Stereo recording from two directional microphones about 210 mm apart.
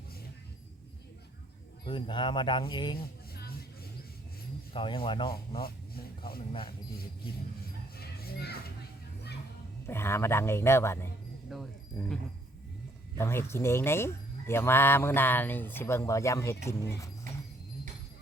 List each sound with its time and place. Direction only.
1.8 s speech: 25° left (ahead or behind)
4.7 s speech: 25° left (ahead or behind)
5.6 s vehicle: 45° left (ahead or behind)
6.5 s speech: 25° left (ahead or behind)
7.9 s a sound: 45° left (ahead or behind)
9.8 s speech: 10° left (ahead or behind)
11.5 s speech: centre (ahead or behind)
12.0 s speech: 15° left (ahead or behind)
13.1 s speech: 10° left (ahead or behind)